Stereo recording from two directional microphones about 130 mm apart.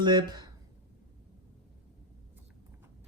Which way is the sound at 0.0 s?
35° right (ahead or behind).